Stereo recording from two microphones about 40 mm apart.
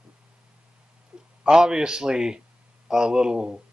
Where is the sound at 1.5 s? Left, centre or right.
Centre.